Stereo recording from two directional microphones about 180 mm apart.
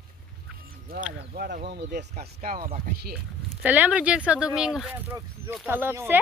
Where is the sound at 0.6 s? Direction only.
55° right (ahead or behind).